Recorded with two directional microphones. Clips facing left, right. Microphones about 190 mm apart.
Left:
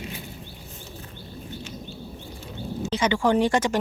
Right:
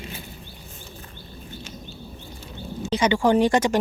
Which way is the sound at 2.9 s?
15° right (ahead or behind).